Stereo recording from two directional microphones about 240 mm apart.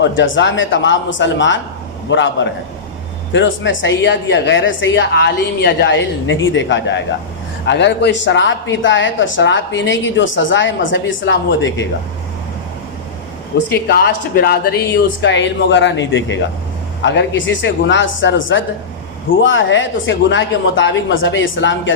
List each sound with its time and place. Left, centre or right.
0.0 s speech: left
13.7 s speech: left